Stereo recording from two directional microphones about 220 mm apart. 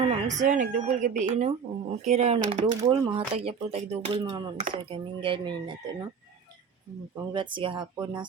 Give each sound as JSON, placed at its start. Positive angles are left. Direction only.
{"t": 0.0, "sound": "speech", "side_deg": -30}
{"t": 7.3, "sound": "speech", "side_deg": -20}